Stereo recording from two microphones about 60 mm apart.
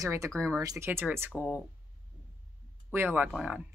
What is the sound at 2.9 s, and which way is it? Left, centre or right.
Speech, right.